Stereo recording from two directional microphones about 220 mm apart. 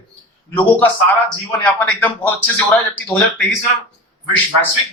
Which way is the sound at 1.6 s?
5° left (ahead or behind).